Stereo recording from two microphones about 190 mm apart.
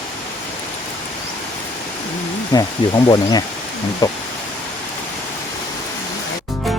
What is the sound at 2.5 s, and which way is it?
Speech, 20° left (ahead or behind).